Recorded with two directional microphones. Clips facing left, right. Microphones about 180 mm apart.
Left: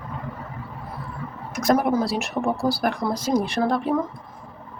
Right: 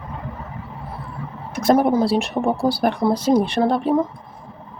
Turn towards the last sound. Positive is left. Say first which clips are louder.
# right 4 dB
turn(degrees=-30)  # may be behind; listen again after turning